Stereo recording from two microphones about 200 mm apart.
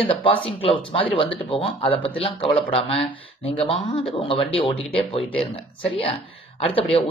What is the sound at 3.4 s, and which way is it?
Speech, 30° left (ahead or behind).